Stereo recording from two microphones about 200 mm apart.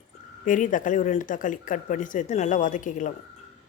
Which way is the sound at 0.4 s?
40° left (ahead or behind).